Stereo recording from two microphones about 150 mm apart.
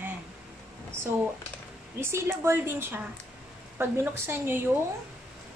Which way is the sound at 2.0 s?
15° right (ahead or behind).